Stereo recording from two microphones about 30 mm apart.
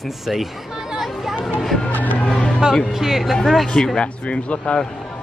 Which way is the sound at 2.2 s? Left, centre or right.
Left.